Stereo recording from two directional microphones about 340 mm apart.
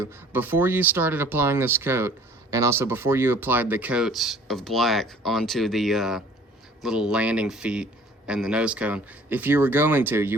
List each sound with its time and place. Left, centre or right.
0.0 s speech: centre